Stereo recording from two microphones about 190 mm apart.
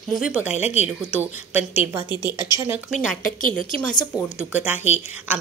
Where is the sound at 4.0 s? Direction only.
15° left (ahead or behind).